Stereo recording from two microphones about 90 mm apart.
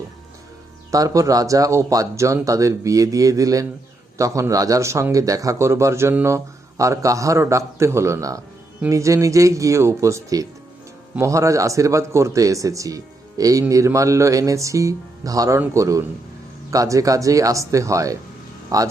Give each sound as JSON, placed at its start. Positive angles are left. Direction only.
{"t": 0.9, "sound": "speech", "side_deg": -40}